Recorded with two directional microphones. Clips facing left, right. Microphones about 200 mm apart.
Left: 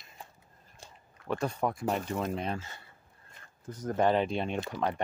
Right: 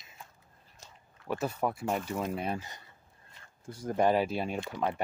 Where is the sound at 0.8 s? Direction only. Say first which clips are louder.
Left 3 dB; 35° left (ahead or behind).